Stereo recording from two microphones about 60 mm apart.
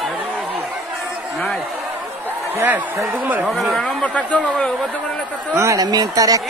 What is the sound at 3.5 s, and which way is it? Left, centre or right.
Speech, centre.